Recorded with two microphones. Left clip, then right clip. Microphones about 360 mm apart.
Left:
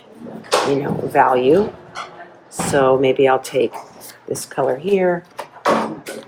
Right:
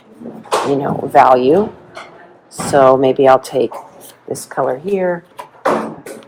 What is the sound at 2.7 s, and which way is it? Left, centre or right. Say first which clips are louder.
Speech: right 6 dB; centre.